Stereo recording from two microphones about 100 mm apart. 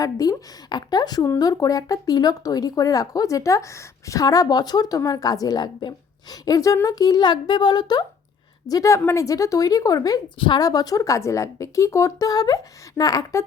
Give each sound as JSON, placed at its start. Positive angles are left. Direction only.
{"t": 0.0, "sound": "a woman's voice", "side_deg": 40}